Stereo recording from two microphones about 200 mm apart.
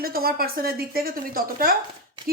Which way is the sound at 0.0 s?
50° right (ahead or behind).